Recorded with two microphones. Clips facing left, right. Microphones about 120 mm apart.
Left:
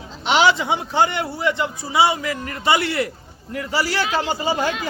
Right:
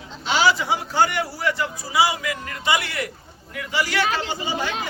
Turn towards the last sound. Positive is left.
turn(degrees=40)  # may be behind; listen again after turning